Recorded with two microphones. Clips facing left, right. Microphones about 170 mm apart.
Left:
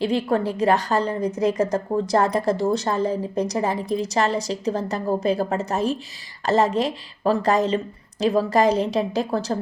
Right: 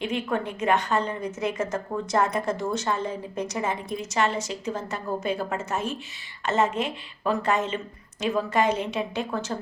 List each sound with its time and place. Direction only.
0.0 s a woman's voice: 35° left (ahead or behind)